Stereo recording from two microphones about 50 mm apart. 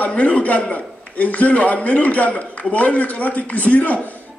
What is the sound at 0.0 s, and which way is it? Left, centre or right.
A man's voice, left.